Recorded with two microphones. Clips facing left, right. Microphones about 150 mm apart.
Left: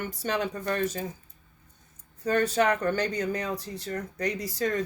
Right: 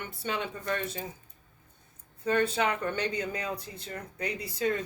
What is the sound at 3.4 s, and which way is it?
Speech, 75° left (ahead or behind).